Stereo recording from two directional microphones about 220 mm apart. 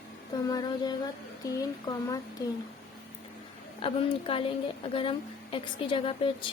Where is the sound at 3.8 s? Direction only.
25° left (ahead or behind).